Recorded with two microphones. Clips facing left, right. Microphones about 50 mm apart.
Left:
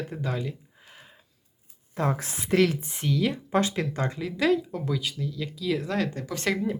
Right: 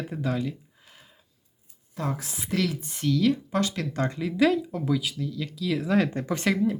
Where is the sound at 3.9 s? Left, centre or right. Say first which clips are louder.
Right 1 dB; centre.